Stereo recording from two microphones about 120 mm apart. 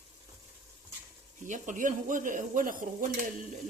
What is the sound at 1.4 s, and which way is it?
Stir, 90° right.